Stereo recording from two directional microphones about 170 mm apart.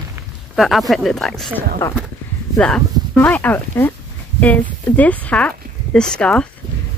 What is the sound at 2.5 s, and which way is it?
Speech, 5° left (ahead or behind).